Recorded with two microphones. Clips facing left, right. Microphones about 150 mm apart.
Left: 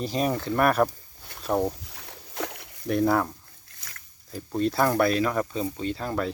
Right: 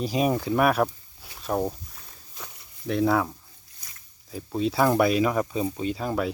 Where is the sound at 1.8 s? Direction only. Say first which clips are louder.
Left 4 dB; 80° left.